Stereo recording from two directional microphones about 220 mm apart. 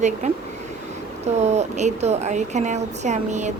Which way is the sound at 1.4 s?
30° right (ahead or behind).